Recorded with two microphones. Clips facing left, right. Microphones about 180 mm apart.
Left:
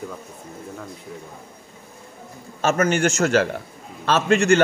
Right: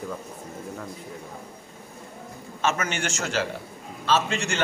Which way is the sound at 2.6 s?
45° left (ahead or behind).